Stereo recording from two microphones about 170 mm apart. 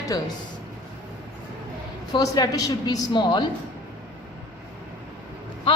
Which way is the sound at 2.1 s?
20° left (ahead or behind).